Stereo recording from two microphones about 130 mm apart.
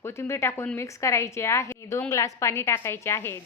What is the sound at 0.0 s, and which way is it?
A woman's voice, 20° left (ahead or behind).